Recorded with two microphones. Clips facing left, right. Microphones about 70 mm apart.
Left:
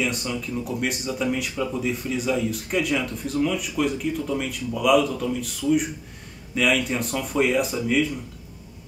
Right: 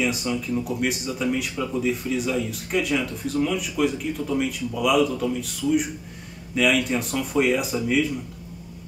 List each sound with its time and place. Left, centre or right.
0.0 s speech: centre